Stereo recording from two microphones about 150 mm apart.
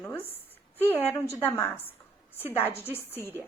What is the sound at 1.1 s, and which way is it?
Speech, 20° left (ahead or behind).